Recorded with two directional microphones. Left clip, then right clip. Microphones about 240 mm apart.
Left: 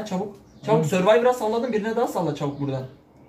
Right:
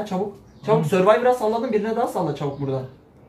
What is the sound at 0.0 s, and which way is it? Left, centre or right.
Speech, centre.